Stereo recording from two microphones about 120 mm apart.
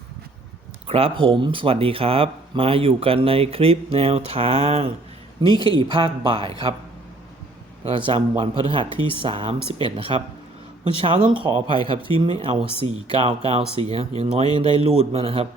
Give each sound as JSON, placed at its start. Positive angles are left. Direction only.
{"t": 0.9, "sound": "speech", "side_deg": -50}
{"t": 5.4, "sound": "speech", "side_deg": -45}
{"t": 7.9, "sound": "speech", "side_deg": -50}